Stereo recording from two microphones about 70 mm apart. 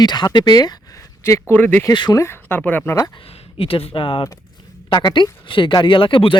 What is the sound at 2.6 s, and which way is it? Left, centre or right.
Speech, left.